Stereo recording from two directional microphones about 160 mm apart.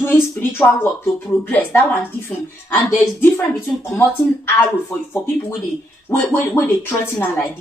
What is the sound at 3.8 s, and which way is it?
Speech, 15° left (ahead or behind).